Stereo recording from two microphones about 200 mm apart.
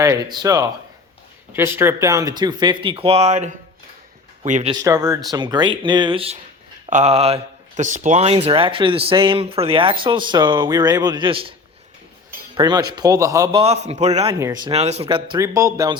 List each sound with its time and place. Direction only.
0.0 s speech: 15° right (ahead or behind); by 4.7 s 35° right (ahead or behind)
4.7 s speech: 15° right (ahead or behind)
12.5 s speech: 20° right (ahead or behind)
13.8 s speech: 35° right (ahead or behind)
14.3 s speech: 15° right (ahead or behind)
14.7 s speech: 30° right (ahead or behind)
15.4 s speech: 15° right (ahead or behind)